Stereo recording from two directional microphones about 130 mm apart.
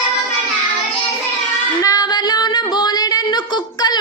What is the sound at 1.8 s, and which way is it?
Female singing, 30° left (ahead or behind).